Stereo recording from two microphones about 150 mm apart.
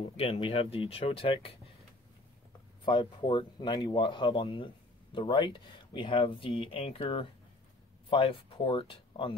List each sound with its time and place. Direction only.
0.0 s speech: 40° left (ahead or behind)
2.8 s speech: 30° left (ahead or behind)